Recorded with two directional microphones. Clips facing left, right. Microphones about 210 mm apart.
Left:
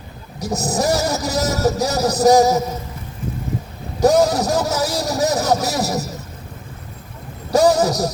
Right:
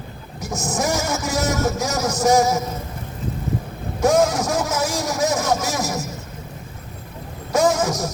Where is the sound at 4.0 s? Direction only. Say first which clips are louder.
Left 3 dB; 35° left (ahead or behind).